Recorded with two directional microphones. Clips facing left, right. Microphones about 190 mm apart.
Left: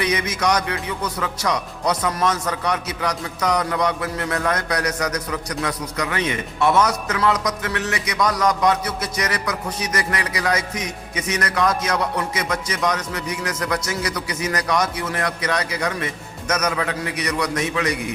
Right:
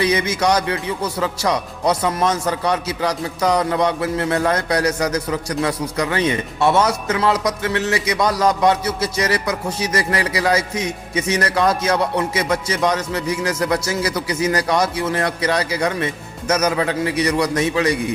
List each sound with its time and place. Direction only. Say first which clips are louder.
0.0 s speech: right 4 dB; 30° right (ahead or behind)